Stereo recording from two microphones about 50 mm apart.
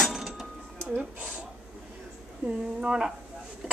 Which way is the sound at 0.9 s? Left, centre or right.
Right.